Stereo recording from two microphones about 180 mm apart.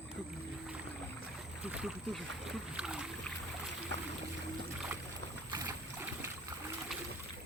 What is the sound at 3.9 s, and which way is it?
Boat, 75° right (ahead or behind).